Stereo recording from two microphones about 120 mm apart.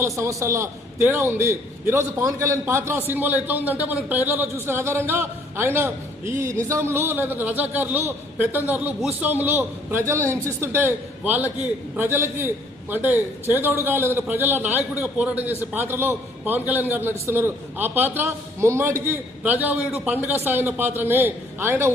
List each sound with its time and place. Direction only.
0.0 s a man's voice: 25° right (ahead or behind)